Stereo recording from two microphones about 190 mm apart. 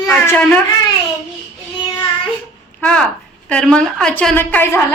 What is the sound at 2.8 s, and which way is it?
A woman's voice, 5° left (ahead or behind).